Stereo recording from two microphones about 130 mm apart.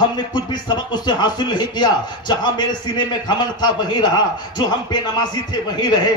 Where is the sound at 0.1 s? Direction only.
35° left (ahead or behind).